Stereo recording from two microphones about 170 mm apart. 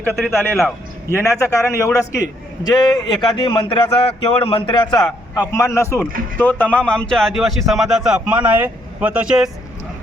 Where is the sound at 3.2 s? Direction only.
25° left (ahead or behind); by 9.4 s 5° right (ahead or behind).